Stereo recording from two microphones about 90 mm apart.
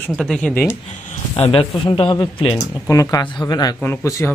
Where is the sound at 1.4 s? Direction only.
90° left; by 2.6 s 75° left (ahead or behind).